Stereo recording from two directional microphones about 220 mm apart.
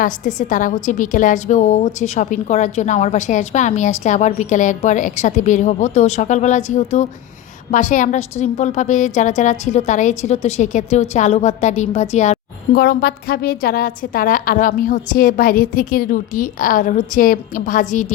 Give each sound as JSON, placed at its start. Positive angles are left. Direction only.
{"t": 0.0, "sound": "a woman's voice", "side_deg": 35}